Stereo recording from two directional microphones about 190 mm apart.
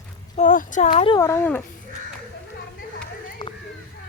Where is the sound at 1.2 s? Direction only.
15° left (ahead or behind).